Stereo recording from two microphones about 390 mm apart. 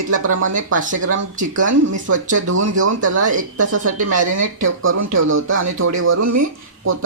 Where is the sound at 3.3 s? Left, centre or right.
Right.